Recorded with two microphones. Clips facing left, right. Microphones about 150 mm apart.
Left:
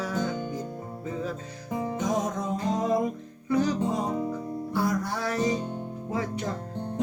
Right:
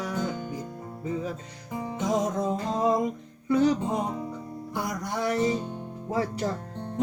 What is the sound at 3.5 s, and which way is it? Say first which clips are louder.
Music: right 2 dB; 25° right (ahead or behind).